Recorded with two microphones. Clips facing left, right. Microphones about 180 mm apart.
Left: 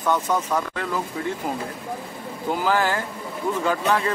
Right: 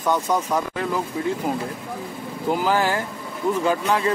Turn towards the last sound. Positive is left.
turn(degrees=-15)  # may be behind; listen again after turning